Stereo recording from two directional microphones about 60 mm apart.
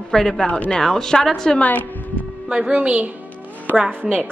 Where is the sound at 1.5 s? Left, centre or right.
Left.